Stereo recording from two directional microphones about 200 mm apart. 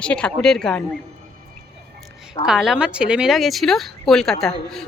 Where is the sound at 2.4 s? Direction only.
5° right (ahead or behind).